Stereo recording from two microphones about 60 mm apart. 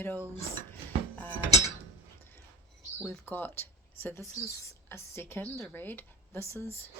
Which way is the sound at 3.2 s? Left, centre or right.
Left.